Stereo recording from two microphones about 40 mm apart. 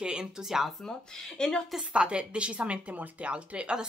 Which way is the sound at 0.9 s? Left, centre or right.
Centre.